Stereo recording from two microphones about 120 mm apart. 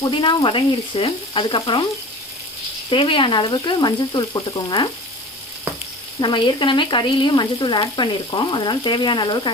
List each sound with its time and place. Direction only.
0.0 s frying: 45° left (ahead or behind)
2.9 s frying: 45° left (ahead or behind)
6.1 s frying: 40° left (ahead or behind)